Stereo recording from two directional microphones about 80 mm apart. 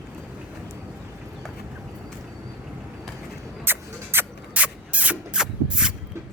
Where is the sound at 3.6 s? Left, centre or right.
Right; by 5.9 s centre.